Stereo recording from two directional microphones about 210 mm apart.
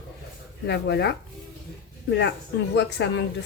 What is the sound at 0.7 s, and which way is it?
A woman's voice, 50° left (ahead or behind).